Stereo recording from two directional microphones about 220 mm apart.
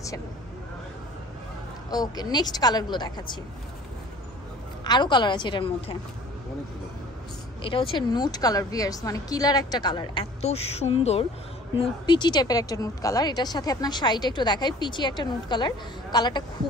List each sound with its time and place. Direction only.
1.9 s a woman's voice: 15° left (ahead or behind)
4.8 s a woman's voice: 20° left (ahead or behind)
7.6 s a woman's voice: 25° left (ahead or behind)